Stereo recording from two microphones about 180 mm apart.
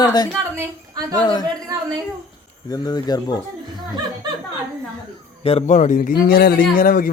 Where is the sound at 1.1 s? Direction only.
25° left (ahead or behind).